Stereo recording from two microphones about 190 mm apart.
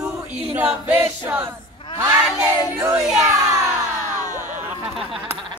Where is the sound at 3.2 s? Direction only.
20° right (ahead or behind).